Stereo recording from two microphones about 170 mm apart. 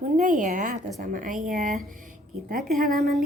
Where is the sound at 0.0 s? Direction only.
50° right (ahead or behind).